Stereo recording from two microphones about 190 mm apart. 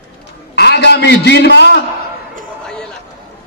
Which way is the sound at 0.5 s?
60° left (ahead or behind).